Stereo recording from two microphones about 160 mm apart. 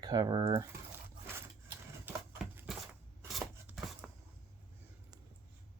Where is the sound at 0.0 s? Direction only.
25° right (ahead or behind).